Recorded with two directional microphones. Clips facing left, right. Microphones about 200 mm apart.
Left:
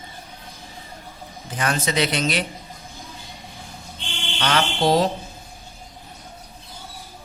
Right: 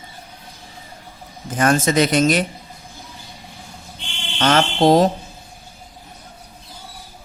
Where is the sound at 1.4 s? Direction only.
45° right (ahead or behind).